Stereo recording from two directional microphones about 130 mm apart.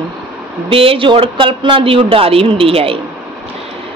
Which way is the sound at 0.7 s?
45° right (ahead or behind).